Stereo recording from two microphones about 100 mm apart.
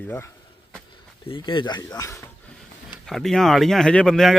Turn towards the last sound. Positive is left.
turn(degrees=5)  # may be behind; listen again after turning